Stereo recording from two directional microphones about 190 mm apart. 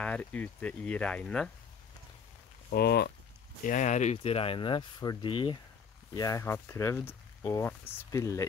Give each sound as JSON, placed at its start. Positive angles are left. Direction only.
{"t": 0.0, "sound": "speech", "side_deg": 5}
{"t": 2.7, "sound": "speech", "side_deg": 55}
{"t": 3.6, "sound": "speech", "side_deg": 40}